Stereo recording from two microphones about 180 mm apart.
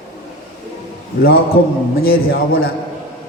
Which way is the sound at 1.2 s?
55° left (ahead or behind).